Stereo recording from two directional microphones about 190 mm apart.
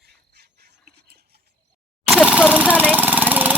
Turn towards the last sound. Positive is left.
turn(degrees=-10)  # may be behind; listen again after turning